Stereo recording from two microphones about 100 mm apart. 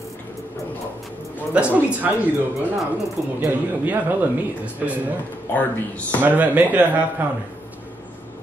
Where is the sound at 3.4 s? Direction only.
20° right (ahead or behind).